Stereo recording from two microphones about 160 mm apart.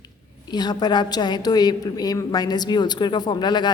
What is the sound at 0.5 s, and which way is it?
A woman's voice, 25° left (ahead or behind).